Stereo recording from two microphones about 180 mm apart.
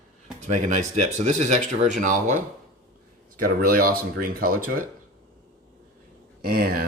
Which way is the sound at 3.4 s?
50° right (ahead or behind).